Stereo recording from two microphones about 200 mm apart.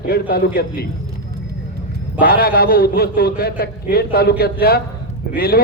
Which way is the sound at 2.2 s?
50° left (ahead or behind).